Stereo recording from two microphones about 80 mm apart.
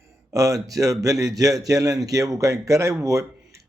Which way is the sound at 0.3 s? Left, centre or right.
Right.